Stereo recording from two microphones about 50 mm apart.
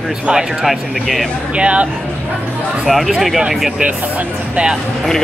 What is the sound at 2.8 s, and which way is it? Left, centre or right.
Speech, centre.